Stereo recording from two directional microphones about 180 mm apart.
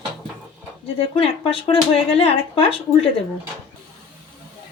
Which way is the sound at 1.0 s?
30° left (ahead or behind).